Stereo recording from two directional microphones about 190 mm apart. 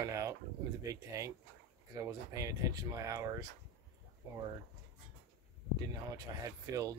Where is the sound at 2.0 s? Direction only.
15° right (ahead or behind).